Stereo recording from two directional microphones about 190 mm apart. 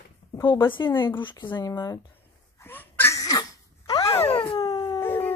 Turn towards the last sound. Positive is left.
turn(degrees=10)  # may be behind; listen again after turning